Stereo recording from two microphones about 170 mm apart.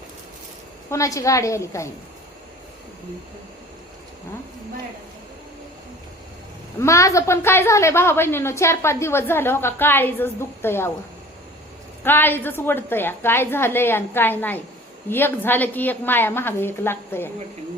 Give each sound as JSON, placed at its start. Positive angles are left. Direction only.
{"t": 0.9, "sound": "a woman's voice", "side_deg": 20}
{"t": 6.7, "sound": "a woman's voice", "side_deg": 15}
{"t": 12.0, "sound": "a woman's voice", "side_deg": 10}